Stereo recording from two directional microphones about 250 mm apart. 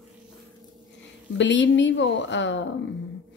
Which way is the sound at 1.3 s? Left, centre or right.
Left.